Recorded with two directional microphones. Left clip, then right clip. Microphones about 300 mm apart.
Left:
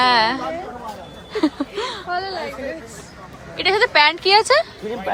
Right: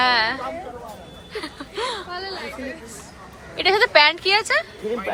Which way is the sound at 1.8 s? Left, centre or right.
Centre.